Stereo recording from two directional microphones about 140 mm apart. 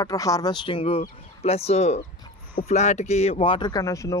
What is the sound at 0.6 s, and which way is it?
Speech, 40° left (ahead or behind).